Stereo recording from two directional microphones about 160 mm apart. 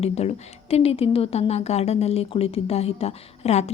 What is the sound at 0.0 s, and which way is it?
Speech, 40° left (ahead or behind).